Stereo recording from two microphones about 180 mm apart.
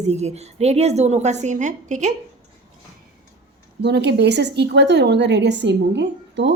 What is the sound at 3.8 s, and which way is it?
A woman's voice, 70° right (ahead or behind).